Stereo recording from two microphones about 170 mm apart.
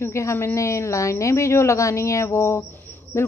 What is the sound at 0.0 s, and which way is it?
Speech, 15° left (ahead or behind).